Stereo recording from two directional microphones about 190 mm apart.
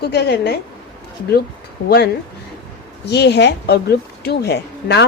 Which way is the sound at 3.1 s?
60° left (ahead or behind).